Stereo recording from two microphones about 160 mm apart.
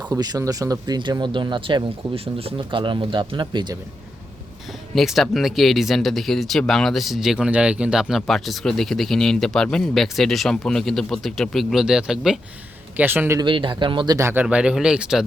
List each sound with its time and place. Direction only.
0.1 s speech: 25° right (ahead or behind)
4.9 s speech: centre (ahead or behind)
13.4 s speech: 30° right (ahead or behind)
14.2 s speech: 15° right (ahead or behind)
14.4 s speech: 5° right (ahead or behind)